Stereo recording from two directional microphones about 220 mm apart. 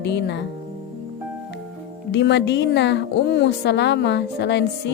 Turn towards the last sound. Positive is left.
turn(degrees=50)  # may be behind; listen again after turning